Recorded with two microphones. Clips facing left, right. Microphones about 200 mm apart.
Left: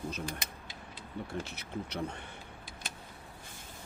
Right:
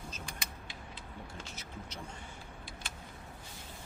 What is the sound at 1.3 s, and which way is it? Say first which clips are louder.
Speech: left 8 dB; 60° left (ahead or behind).